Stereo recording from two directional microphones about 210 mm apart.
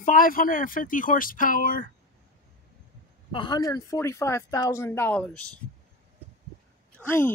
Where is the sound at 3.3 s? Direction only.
25° left (ahead or behind).